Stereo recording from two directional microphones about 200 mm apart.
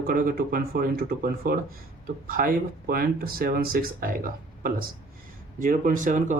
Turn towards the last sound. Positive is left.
turn(degrees=-40)  # may be behind; listen again after turning